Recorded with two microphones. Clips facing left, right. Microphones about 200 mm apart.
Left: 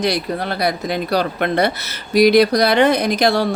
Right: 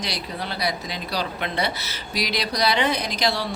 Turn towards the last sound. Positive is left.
turn(degrees=50)  # may be behind; listen again after turning